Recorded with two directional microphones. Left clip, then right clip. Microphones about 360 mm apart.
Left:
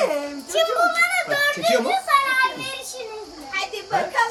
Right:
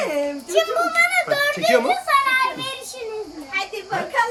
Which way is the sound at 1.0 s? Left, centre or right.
Centre.